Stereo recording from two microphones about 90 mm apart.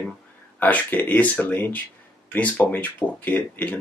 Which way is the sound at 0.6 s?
20° left (ahead or behind).